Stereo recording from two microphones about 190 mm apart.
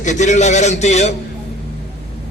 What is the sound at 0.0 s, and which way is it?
A man's voice, 40° left (ahead or behind).